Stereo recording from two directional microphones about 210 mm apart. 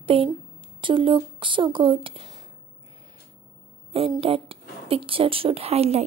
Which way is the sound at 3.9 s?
25° right (ahead or behind).